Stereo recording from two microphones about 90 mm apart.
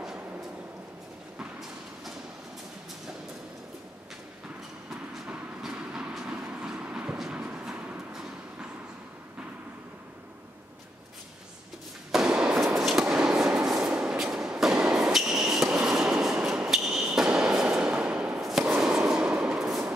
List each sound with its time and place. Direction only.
1.4 s a sound: 5° right (ahead or behind)
5.3 s train: 10° right (ahead or behind)
8.1 s vehicle: 5° right (ahead or behind)
12.1 s a sound: 10° right (ahead or behind)
18.4 s fireworks: 5° right (ahead or behind)
18.8 s train: 5° right (ahead or behind)